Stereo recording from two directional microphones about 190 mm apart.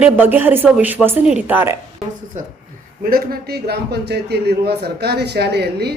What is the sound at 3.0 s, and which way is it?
A man's voice, 50° right (ahead or behind).